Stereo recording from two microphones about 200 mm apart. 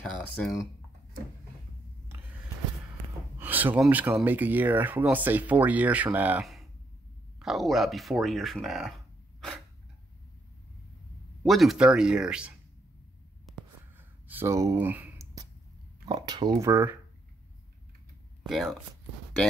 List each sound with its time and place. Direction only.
0.0 s speech: 5° left (ahead or behind)
3.3 s speech: 10° right (ahead or behind)
11.4 s speech: centre (ahead or behind)
13.5 s a sound: 5° right (ahead or behind)
16.1 s speech: 20° right (ahead or behind)
18.4 s speech: centre (ahead or behind)